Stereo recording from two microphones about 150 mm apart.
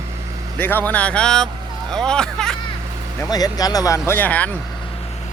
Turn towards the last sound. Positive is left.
turn(degrees=10)  # may be behind; listen again after turning